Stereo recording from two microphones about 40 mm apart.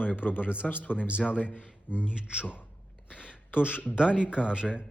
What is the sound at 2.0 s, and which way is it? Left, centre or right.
Speech, right.